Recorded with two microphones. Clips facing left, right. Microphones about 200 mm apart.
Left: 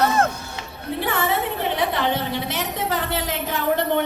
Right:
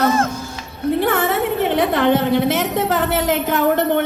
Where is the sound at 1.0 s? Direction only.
50° right (ahead or behind).